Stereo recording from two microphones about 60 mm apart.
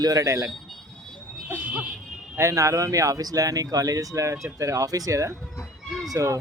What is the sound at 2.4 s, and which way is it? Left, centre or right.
Speech, right.